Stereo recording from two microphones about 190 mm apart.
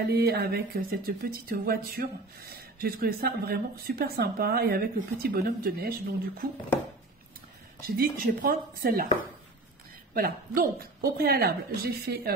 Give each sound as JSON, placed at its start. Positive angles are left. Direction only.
{"t": 0.1, "sound": "a woman's voice", "side_deg": -55}
{"t": 7.8, "sound": "speech", "side_deg": -50}
{"t": 10.1, "sound": "speech", "side_deg": -50}